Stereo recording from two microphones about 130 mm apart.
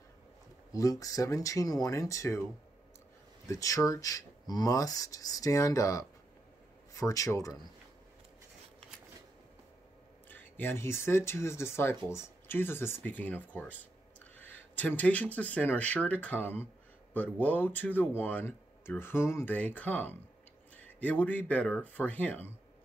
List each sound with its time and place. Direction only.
0.7 s speech: 25° left (ahead or behind)
3.4 s speech: 25° left (ahead or behind)
10.3 s speech: 15° left (ahead or behind)